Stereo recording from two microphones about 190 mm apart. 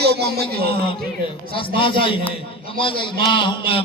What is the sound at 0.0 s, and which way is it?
Speech, 60° right (ahead or behind).